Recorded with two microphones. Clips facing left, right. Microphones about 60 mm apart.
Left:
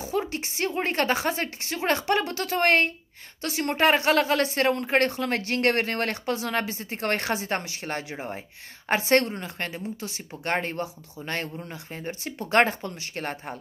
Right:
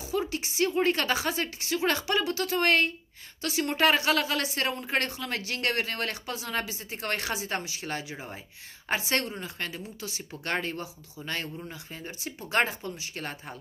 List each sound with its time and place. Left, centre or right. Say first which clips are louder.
0.2 s a woman's voice: right 1 dB; left